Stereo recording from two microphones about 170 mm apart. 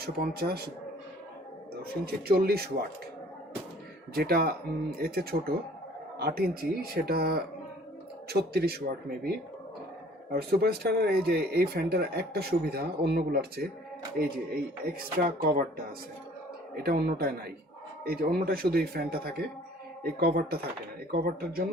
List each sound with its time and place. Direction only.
0.0 s speech: 65° right (ahead or behind)
1.8 s speech: 65° right (ahead or behind)
4.1 s speech: 65° right (ahead or behind)
10.6 s speech: 70° right (ahead or behind)
16.7 s speech: 65° right (ahead or behind)